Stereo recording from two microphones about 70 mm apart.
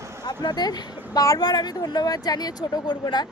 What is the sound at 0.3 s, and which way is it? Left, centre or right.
Speech, left.